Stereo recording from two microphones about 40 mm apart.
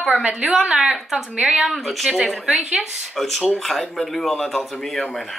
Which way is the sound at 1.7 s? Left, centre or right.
Centre.